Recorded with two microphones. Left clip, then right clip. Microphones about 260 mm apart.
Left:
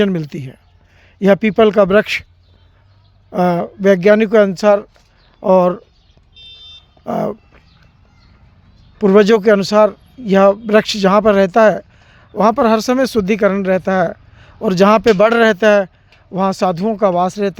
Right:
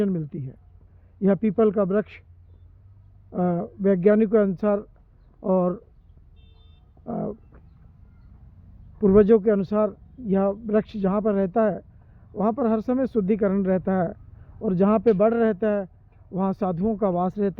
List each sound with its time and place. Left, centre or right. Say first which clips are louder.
0.0 s speech: left 10 dB; left
3.3 s speech: left 11 dB; centre
7.0 s speech: left 12 dB; left
9.0 s speech: left 7 dB; centre